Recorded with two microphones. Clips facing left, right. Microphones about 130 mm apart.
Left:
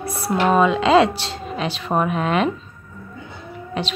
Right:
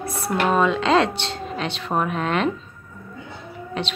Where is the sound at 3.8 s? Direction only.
5° left (ahead or behind).